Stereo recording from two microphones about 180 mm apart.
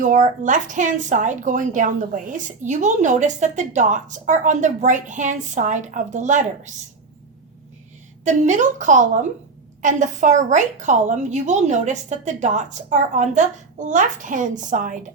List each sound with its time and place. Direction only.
0.0 s a woman's voice: 45° right (ahead or behind)
8.2 s a woman's voice: 40° right (ahead or behind)